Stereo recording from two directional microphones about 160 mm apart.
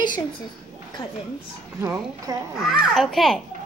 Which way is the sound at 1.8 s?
15° right (ahead or behind).